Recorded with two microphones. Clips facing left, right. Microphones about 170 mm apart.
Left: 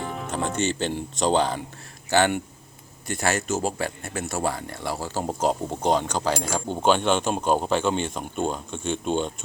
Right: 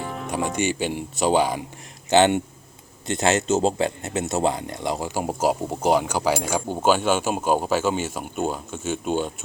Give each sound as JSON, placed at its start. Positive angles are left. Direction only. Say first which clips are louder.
{"t": 0.0, "sound": "music", "louder": "even", "side_deg": 0}
{"t": 0.3, "sound": "speech", "louder": "right 2 dB", "side_deg": -10}
{"t": 2.0, "sound": "speech", "louder": "right 4 dB", "side_deg": -20}